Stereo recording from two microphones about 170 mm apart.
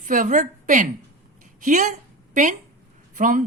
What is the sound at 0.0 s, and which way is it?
A woman's voice, 50° right (ahead or behind).